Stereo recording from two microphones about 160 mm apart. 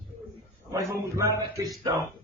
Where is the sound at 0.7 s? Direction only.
20° right (ahead or behind).